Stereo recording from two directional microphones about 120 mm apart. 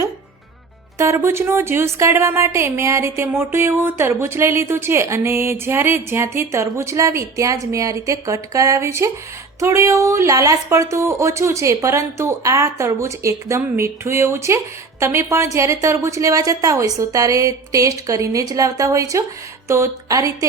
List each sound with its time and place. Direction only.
0.9 s speech: 25° right (ahead or behind)